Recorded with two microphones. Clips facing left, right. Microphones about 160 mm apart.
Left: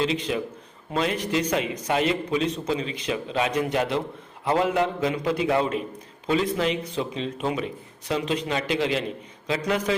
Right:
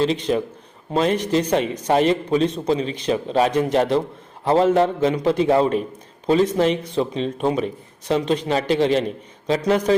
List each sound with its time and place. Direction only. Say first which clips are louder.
0.0 s a man's voice: right 5 dB; 40° right (ahead or behind)